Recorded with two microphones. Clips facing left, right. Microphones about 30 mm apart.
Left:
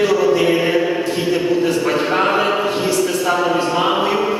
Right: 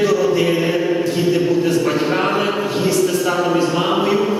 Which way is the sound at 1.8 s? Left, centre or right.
Centre.